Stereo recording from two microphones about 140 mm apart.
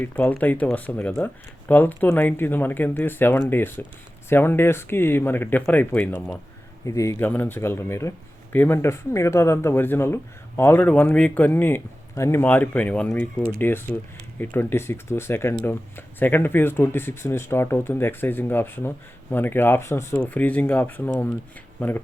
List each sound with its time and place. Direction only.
0.0 s speech: 10° left (ahead or behind)
6.8 s speech: 20° left (ahead or behind)